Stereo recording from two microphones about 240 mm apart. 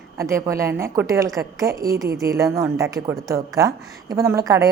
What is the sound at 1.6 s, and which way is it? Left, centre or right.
Speech, right.